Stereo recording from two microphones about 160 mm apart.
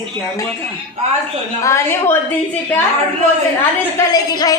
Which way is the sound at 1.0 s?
45° right (ahead or behind).